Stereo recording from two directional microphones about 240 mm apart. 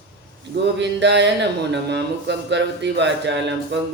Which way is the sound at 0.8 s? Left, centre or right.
Right.